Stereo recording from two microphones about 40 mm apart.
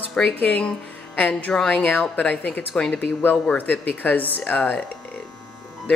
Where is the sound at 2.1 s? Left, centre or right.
Left.